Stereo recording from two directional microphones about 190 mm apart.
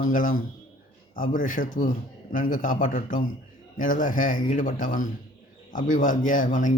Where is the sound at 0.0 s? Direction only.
45° left (ahead or behind).